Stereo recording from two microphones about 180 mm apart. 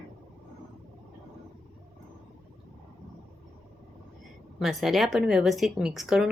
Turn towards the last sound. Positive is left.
turn(degrees=0)  # may be behind; listen again after turning